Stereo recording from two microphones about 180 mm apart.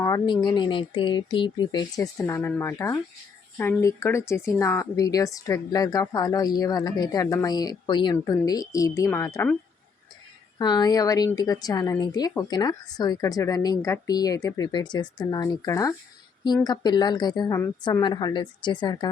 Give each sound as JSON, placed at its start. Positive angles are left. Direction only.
{"t": 0.0, "sound": "speech", "side_deg": 20}
{"t": 10.6, "sound": "speech", "side_deg": 25}